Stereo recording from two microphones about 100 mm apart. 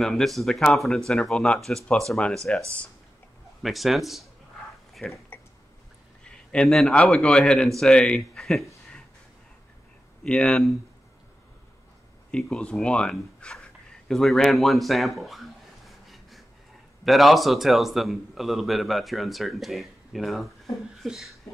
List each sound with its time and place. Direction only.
0.0 s a man's voice: 5° left (ahead or behind)
3.6 s a man's voice: centre (ahead or behind)
5.0 s a man's voice: 15° left (ahead or behind)
6.5 s a man's voice: 10° left (ahead or behind)
10.2 s a man's voice: 10° left (ahead or behind)
12.3 s speech: 10° left (ahead or behind)
16.1 s pant: centre (ahead or behind)
17.0 s a man's voice: centre (ahead or behind)